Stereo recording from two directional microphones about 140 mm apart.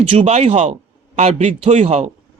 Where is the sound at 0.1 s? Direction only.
45° right (ahead or behind).